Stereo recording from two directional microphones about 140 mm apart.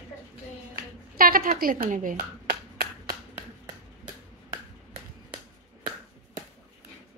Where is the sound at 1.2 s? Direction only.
90° right.